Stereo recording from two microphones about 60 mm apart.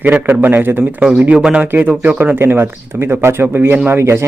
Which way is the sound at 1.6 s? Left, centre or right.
Right.